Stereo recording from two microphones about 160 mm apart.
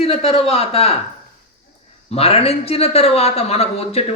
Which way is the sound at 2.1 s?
40° left (ahead or behind).